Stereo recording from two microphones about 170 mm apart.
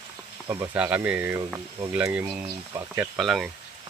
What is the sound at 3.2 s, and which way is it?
Speech, centre (ahead or behind).